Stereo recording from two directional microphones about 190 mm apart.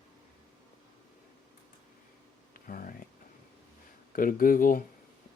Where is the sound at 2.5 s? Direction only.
45° left (ahead or behind).